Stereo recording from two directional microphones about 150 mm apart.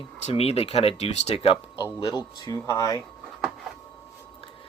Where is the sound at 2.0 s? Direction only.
25° left (ahead or behind).